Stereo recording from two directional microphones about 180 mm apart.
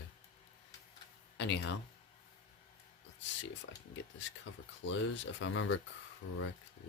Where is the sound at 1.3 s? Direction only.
75° left (ahead or behind).